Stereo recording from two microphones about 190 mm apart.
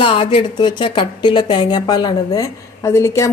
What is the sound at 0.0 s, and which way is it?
Speech, 30° left (ahead or behind).